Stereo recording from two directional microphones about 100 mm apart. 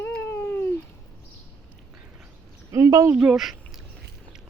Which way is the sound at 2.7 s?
35° right (ahead or behind).